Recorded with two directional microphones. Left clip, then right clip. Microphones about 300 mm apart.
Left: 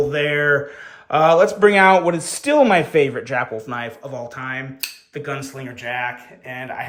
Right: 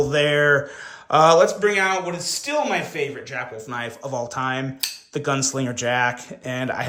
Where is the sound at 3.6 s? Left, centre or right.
Centre.